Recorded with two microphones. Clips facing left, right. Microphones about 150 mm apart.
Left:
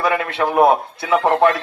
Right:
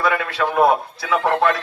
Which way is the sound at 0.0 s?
20° left (ahead or behind).